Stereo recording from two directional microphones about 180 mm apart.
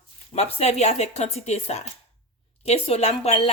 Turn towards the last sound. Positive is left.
turn(degrees=35)  # may be behind; listen again after turning